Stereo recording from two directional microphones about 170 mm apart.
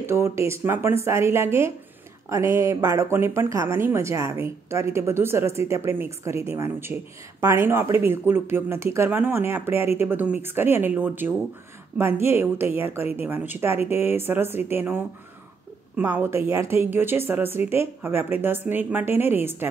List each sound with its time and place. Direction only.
0.0 s speech: 15° right (ahead or behind)